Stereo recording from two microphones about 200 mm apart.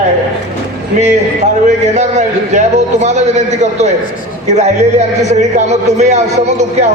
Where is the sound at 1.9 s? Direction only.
35° right (ahead or behind).